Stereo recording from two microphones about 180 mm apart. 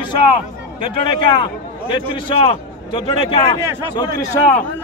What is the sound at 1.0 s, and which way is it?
Speech, 25° left (ahead or behind).